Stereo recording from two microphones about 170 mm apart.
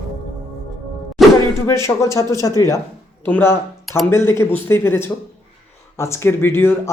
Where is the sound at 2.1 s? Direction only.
20° left (ahead or behind).